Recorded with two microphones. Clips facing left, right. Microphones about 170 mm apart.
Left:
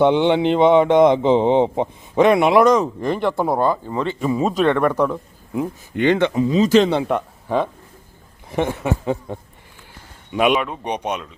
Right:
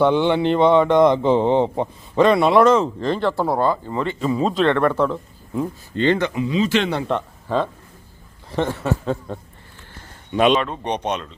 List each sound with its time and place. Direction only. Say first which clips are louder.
0.0 s speech: left 2 dB; 20° left (ahead or behind)
6.3 s speech: left 5 dB; 40° left (ahead or behind)
7.1 s speech: left 1 dB; 10° left (ahead or behind)